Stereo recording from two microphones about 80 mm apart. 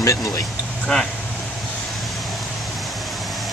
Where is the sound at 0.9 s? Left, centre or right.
Centre.